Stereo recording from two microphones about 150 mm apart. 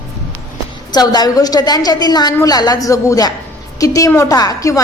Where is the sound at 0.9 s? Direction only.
25° left (ahead or behind).